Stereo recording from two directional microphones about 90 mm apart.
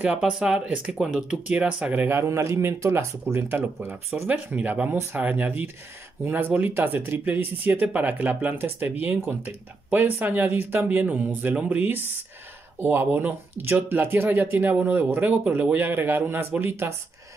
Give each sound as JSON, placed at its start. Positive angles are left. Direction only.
{"t": 0.0, "sound": "speech", "side_deg": -10}
{"t": 2.1, "sound": "speech", "side_deg": -35}